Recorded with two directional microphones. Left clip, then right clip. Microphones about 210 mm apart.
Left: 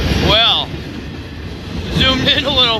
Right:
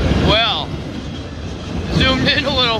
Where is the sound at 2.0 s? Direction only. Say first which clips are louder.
Left 2 dB; 5° left (ahead or behind).